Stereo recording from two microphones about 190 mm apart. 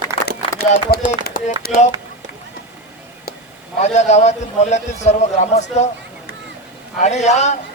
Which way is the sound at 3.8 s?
35° left (ahead or behind).